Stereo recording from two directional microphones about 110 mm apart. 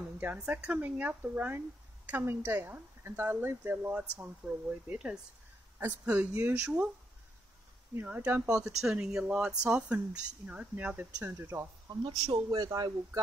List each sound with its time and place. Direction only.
0.4 s speech: 10° right (ahead or behind)
7.9 s speech: 15° right (ahead or behind)
12.3 s a man's voice: 40° right (ahead or behind)